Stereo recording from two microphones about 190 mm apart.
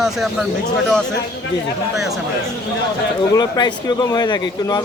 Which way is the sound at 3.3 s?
20° left (ahead or behind).